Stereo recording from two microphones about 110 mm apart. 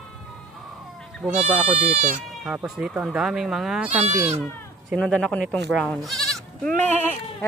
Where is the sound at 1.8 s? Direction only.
85° right.